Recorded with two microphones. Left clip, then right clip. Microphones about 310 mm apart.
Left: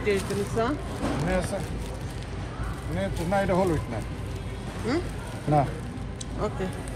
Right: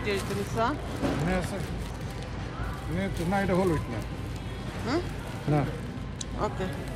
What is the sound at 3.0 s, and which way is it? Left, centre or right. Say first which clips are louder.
Speech: left 3 dB; centre.